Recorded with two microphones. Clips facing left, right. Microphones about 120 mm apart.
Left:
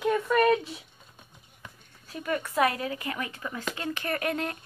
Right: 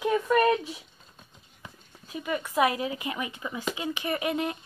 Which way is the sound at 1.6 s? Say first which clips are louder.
Right 2 dB; 15° right (ahead or behind).